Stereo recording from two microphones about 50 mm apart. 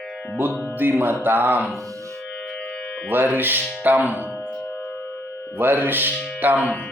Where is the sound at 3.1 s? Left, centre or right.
Right.